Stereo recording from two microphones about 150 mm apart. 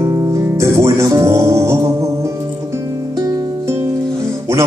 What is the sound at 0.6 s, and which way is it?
Music, 20° right (ahead or behind).